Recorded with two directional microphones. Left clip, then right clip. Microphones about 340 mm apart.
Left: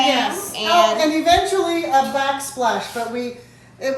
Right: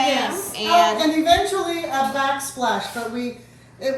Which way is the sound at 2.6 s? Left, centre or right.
Centre.